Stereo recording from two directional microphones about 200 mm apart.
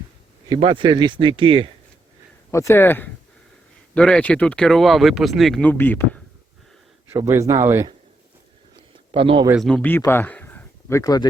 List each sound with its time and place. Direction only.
0.4 s speech: 20° right (ahead or behind)
2.5 s speech: 15° left (ahead or behind)
7.1 s speech: 15° right (ahead or behind)
8.7 s a sound: 25° right (ahead or behind)
9.5 s speech: centre (ahead or behind); by 11.3 s 20° left (ahead or behind)